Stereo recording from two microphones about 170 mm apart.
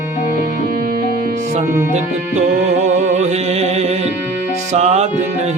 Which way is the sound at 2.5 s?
45° right (ahead or behind).